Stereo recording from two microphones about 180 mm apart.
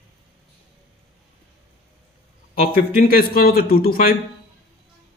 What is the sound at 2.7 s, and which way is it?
Speech, 55° left (ahead or behind).